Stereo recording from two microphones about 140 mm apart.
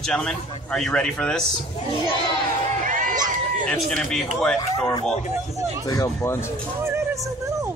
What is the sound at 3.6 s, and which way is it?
Speech, 5° left (ahead or behind).